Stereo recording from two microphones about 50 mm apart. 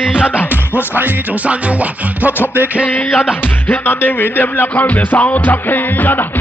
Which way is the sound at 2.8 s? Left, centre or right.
Left.